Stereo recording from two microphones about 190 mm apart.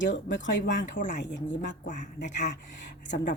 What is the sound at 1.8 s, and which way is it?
Speech, 40° left (ahead or behind).